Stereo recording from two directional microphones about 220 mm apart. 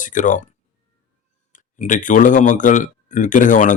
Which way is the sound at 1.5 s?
35° left (ahead or behind).